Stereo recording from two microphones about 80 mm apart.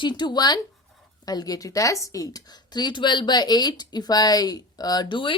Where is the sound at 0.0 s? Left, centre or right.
Left.